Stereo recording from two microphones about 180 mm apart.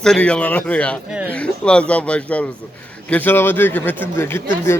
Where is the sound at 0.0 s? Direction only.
5° left (ahead or behind).